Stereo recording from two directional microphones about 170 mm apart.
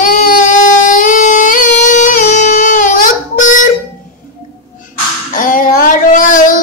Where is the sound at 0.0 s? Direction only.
50° left (ahead or behind).